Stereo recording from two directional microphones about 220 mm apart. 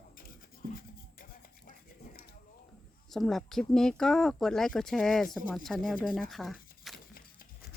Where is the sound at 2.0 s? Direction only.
40° left (ahead or behind).